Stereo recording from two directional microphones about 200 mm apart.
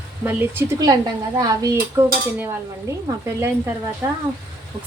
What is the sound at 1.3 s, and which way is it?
Dishes, 20° right (ahead or behind).